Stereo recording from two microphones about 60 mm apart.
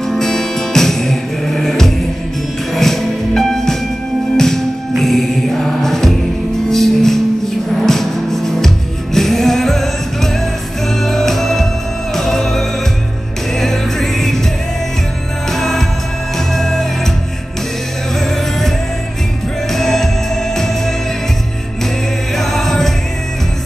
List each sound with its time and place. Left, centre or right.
0.0 s music: centre
15.5 s music: centre
18.2 s music: centre
19.7 s music: centre
22.3 s music: centre